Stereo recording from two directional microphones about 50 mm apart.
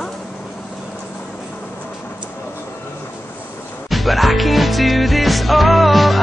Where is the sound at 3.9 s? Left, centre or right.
Centre.